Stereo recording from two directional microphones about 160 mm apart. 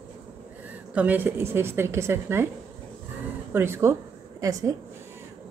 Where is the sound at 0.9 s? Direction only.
10° right (ahead or behind).